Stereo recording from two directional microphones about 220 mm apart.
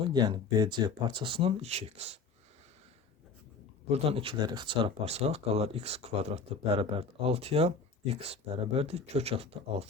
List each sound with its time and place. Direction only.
0.1 s speech: 20° right (ahead or behind)
3.9 s speech: 25° right (ahead or behind)